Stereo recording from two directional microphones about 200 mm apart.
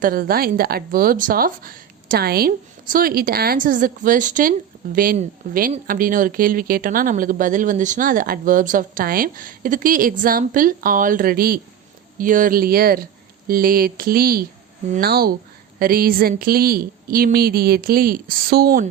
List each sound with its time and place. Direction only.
0.0 s speech: 45° right (ahead or behind)